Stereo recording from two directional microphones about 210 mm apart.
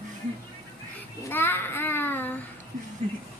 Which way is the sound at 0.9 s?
10° left (ahead or behind).